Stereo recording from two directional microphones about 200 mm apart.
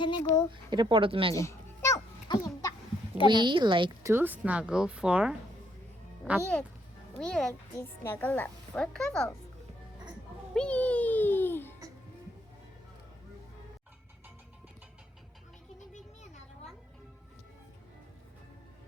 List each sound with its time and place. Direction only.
0.0 s speech: 20° left (ahead or behind)
0.5 s speech: 25° right (ahead or behind)
1.3 s a sound: 15° left (ahead or behind)
3.2 s speech: 25° right (ahead or behind)
4.1 s a child's voice: 10° right (ahead or behind)
7.2 s a child's voice: 5° left (ahead or behind)
10.5 s music: 5° left (ahead or behind)
15.9 s music: 35° left (ahead or behind)